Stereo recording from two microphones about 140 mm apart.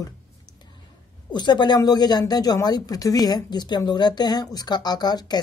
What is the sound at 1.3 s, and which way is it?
A woman's voice, 30° left (ahead or behind).